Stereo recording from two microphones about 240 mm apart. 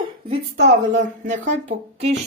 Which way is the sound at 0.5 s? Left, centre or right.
Right.